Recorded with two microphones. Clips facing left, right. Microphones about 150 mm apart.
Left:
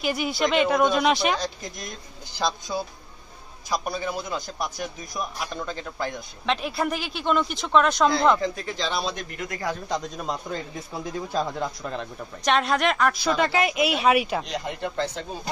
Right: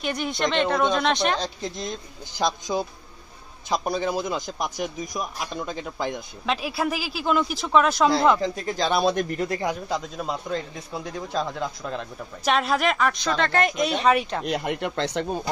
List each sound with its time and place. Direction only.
0.0 s speech: 5° left (ahead or behind)
1.4 s a man's voice: 25° right (ahead or behind)
6.4 s speech: 5° right (ahead or behind)
8.4 s speech: 45° right (ahead or behind)
9.4 s speech: 30° right (ahead or behind)
9.8 s speech: centre (ahead or behind)
14.4 s speech: 60° right (ahead or behind)